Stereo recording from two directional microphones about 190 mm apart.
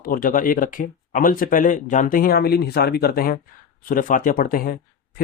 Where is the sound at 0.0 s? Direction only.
45° left (ahead or behind).